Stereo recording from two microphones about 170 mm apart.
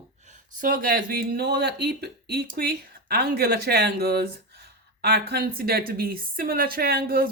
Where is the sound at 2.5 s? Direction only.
65° right (ahead or behind).